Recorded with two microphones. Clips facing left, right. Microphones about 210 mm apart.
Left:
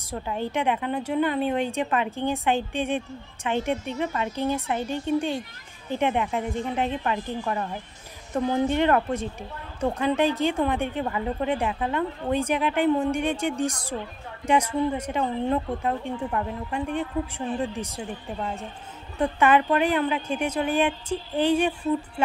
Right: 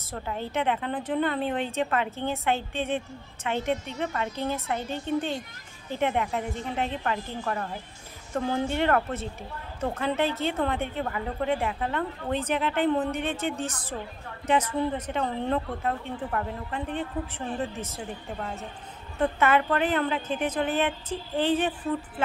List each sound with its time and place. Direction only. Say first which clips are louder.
0.1 s speech: left 3 dB; 15° left (ahead or behind)
19.1 s speech: left 3 dB; 15° left (ahead or behind)